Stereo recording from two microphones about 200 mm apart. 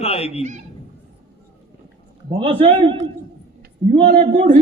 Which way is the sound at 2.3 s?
25° right (ahead or behind).